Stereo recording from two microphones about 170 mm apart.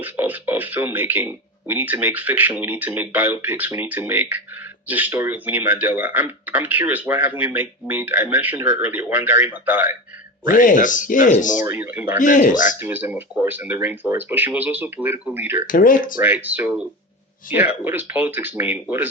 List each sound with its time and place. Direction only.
0.0 s speech: 10° right (ahead or behind)
10.4 s speech: 50° left (ahead or behind)
11.6 s speech: 10° right (ahead or behind)
12.2 s speech: 50° left (ahead or behind)
12.8 s speech: 10° right (ahead or behind)
15.6 s speech: 55° left (ahead or behind)
16.2 s speech: 10° right (ahead or behind)